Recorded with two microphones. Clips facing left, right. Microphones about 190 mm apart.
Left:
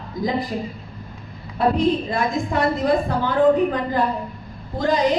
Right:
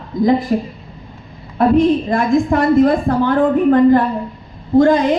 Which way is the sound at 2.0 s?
50° right (ahead or behind).